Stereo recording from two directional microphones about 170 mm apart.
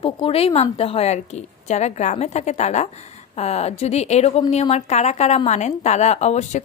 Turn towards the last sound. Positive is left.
turn(degrees=40)  # may be behind; listen again after turning